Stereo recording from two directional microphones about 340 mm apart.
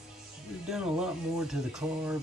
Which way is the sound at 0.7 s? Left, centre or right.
Centre.